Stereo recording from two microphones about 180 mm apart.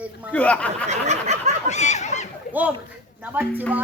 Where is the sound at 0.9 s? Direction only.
40° right (ahead or behind).